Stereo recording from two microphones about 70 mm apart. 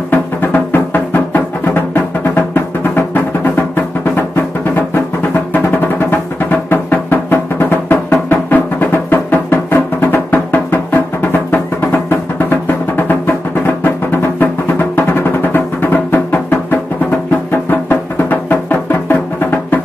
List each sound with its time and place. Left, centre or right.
0.1 s music: left
5.5 s music: left